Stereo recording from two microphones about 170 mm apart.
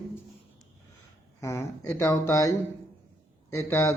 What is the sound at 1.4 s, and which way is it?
Speech, 15° left (ahead or behind).